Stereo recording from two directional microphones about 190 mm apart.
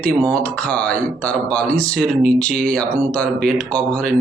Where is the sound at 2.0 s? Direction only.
45° right (ahead or behind).